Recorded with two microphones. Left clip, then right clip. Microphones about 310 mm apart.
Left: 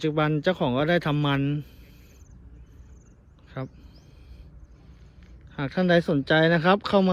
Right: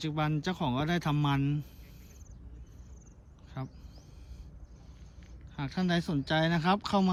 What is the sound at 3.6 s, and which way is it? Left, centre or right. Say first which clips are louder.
Speech: left 7 dB; centre.